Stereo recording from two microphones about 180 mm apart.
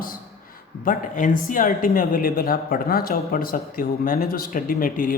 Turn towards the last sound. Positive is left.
turn(degrees=50)  # may be behind; listen again after turning